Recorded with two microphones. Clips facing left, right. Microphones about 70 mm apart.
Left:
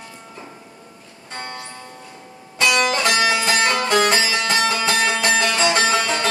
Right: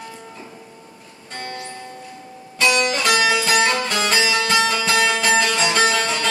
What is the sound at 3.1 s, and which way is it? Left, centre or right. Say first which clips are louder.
Music: right 1 dB; left.